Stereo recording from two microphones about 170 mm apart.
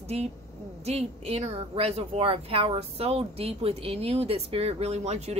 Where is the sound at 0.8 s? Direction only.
40° right (ahead or behind).